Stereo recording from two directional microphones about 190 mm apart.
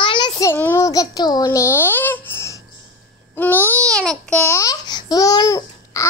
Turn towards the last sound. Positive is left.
turn(degrees=15)  # may be behind; listen again after turning